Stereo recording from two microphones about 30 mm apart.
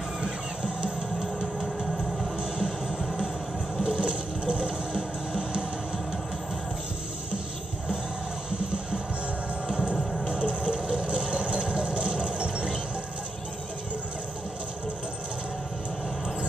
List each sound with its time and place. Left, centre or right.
2.6 s music: centre
4.0 s a sound: right
9.9 s music: centre
10.4 s vehicle: right